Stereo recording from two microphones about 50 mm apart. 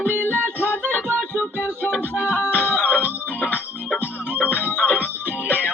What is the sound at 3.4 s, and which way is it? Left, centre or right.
Music, left.